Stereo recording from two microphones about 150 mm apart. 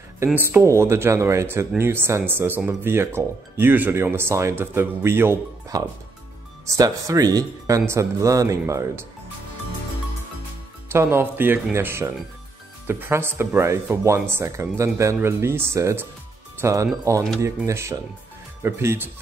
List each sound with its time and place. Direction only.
0.2 s speech: 15° right (ahead or behind)
10.9 s speech: 15° right (ahead or behind)